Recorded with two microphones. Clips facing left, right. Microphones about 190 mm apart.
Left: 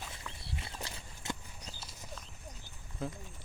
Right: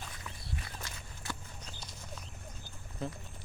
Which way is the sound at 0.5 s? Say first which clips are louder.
Left 1 dB; 30° left (ahead or behind).